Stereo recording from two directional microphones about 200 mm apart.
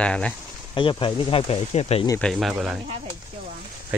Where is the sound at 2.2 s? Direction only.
Centre (ahead or behind).